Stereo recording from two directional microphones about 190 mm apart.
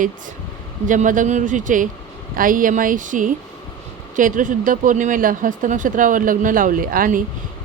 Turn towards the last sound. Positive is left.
turn(degrees=-45)  # may be behind; listen again after turning